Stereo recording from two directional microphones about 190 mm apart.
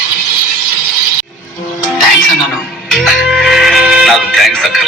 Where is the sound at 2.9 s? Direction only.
Centre (ahead or behind).